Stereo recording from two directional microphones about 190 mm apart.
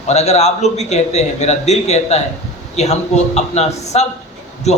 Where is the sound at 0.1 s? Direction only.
35° left (ahead or behind).